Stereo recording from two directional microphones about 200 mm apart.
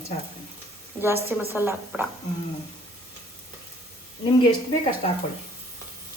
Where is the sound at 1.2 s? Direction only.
10° right (ahead or behind).